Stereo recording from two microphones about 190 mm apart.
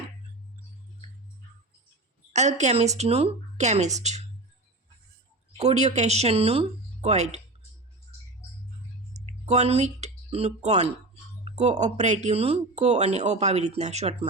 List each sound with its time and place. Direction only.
2.3 s speech: 35° right (ahead or behind)
5.5 s speech: 35° right (ahead or behind)
9.2 s speech: 35° right (ahead or behind)